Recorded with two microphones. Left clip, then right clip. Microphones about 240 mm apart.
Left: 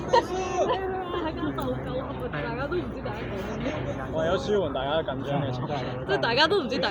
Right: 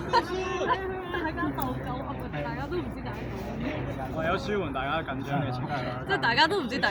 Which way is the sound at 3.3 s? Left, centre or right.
Centre.